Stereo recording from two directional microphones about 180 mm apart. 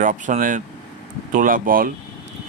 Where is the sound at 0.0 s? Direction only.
45° right (ahead or behind).